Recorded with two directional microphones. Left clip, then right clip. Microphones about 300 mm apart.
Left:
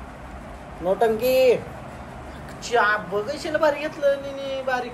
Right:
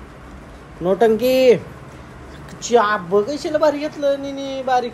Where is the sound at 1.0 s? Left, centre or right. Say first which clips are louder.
Right 4 dB; right.